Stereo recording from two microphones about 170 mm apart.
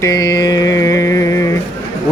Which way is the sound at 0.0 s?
20° left (ahead or behind).